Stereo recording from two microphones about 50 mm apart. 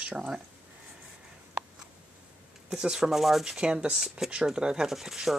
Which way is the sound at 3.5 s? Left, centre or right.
Centre.